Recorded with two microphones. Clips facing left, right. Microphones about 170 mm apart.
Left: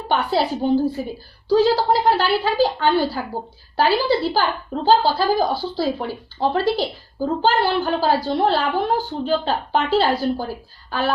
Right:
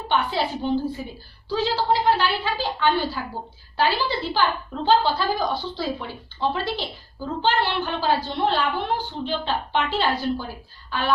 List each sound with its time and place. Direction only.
0.1 s a woman's voice: 40° left (ahead or behind)